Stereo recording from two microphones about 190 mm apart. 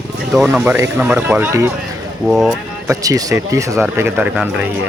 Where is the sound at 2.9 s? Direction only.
20° right (ahead or behind).